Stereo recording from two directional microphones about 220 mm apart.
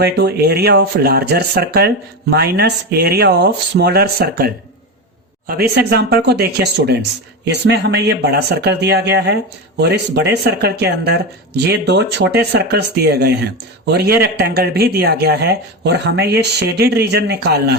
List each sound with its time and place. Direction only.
0.0 s speech: 45° right (ahead or behind)